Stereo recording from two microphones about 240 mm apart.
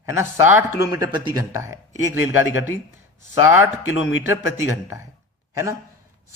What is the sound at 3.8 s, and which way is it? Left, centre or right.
Speech, left.